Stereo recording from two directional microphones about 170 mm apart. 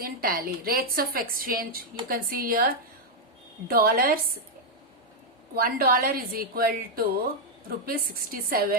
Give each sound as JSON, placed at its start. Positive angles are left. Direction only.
{"t": 0.0, "sound": "a woman's voice", "side_deg": -60}
{"t": 5.5, "sound": "a woman's voice", "side_deg": -60}